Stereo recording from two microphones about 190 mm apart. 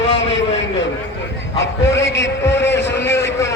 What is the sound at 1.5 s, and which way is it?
A man's voice, 70° left (ahead or behind).